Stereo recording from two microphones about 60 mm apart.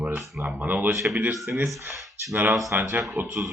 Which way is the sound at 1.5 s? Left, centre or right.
Right.